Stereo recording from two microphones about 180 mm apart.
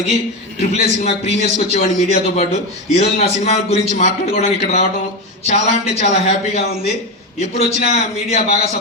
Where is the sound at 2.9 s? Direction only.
35° left (ahead or behind).